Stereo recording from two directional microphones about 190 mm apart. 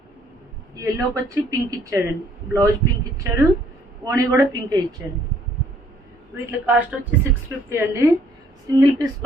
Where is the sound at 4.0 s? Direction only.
20° right (ahead or behind).